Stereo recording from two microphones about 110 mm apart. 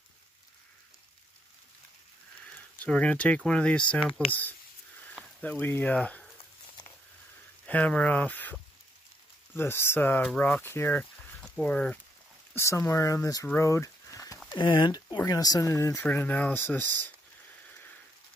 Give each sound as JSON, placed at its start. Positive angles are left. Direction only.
{"t": 2.5, "sound": "speech", "side_deg": 10}
{"t": 7.6, "sound": "speech", "side_deg": 15}
{"t": 11.4, "sound": "speech", "side_deg": 10}
{"t": 12.5, "sound": "speech", "side_deg": 25}
{"t": 13.6, "sound": "a sound", "side_deg": 30}
{"t": 14.5, "sound": "speech", "side_deg": 45}